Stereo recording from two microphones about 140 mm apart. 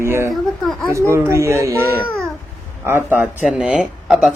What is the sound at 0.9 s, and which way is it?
Speech, 20° right (ahead or behind).